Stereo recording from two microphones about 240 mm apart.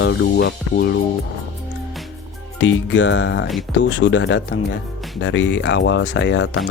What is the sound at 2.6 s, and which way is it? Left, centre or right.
Speech, left.